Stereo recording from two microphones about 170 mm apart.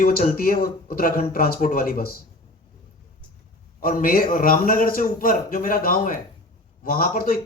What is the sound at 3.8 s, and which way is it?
Speech, 55° left (ahead or behind).